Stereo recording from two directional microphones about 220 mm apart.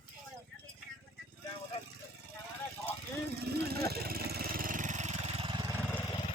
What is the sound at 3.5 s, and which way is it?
Speech, 45° right (ahead or behind).